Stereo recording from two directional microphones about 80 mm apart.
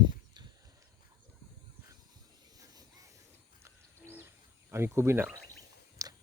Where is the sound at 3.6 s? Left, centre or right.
Right.